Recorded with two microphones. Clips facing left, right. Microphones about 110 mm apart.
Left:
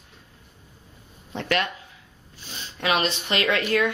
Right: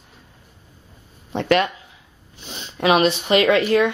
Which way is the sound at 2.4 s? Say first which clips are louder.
Right 8 dB; 20° right (ahead or behind).